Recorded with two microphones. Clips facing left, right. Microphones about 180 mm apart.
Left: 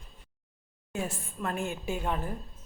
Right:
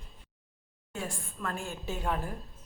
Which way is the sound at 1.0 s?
20° left (ahead or behind).